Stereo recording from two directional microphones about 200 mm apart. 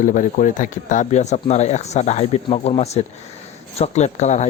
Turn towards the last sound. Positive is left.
turn(degrees=35)  # may be behind; listen again after turning